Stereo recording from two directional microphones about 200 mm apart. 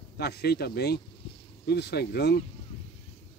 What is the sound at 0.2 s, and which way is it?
Speech, 55° left (ahead or behind).